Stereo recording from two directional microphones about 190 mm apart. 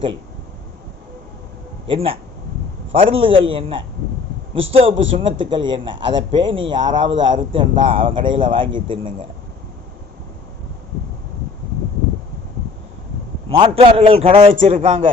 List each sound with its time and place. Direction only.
1.9 s a man's voice: 30° right (ahead or behind)
13.5 s a man's voice: 30° right (ahead or behind)